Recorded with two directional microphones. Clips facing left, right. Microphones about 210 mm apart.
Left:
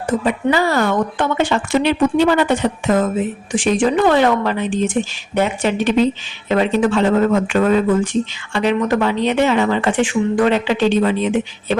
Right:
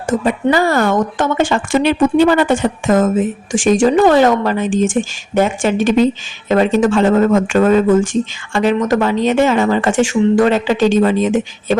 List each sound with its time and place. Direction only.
0.5 s a woman's voice: 50° right (ahead or behind)